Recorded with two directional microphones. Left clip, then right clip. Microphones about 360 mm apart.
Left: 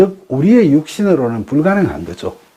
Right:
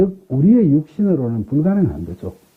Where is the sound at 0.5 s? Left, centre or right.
Centre.